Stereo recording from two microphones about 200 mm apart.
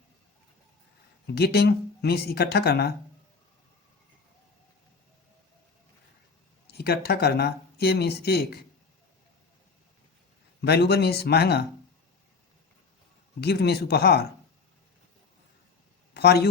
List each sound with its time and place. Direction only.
1.4 s speech: 55° left (ahead or behind)
6.7 s speech: 50° left (ahead or behind)
10.6 s speech: 55° left (ahead or behind)
13.4 s speech: 55° left (ahead or behind)
16.1 s speech: 55° left (ahead or behind)